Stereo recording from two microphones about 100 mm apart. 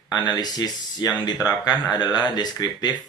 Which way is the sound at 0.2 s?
45° left (ahead or behind).